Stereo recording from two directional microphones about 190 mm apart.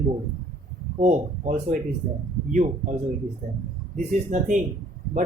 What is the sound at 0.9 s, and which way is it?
Speech, 40° right (ahead or behind).